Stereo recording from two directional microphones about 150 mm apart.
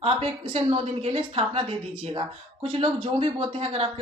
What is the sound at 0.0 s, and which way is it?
Speech, 40° right (ahead or behind).